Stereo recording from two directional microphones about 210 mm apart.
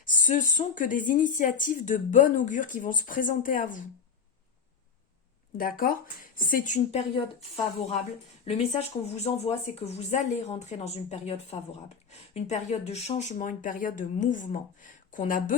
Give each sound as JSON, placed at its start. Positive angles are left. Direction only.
{"t": 0.0, "sound": "speech", "side_deg": 40}
{"t": 5.5, "sound": "speech", "side_deg": 45}
{"t": 8.4, "sound": "speech", "side_deg": 30}